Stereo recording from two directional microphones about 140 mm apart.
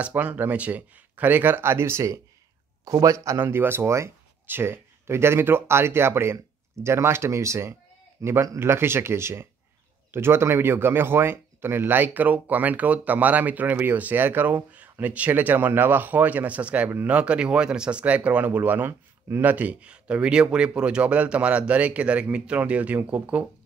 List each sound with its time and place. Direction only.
0.0 s speech: 10° right (ahead or behind)